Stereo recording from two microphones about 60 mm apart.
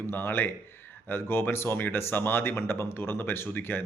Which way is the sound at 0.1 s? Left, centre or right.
Left.